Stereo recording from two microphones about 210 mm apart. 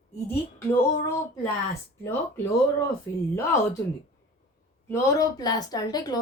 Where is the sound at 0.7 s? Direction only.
15° left (ahead or behind).